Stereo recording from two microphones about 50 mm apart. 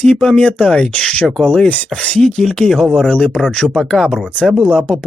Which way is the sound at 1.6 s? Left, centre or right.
Left.